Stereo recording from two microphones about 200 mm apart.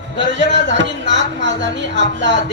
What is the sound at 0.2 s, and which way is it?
A man's voice, 65° right (ahead or behind).